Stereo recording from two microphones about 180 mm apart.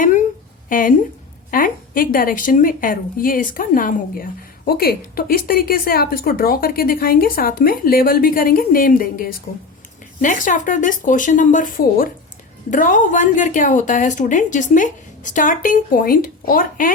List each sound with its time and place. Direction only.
0.7 s a woman's voice: 50° left (ahead or behind)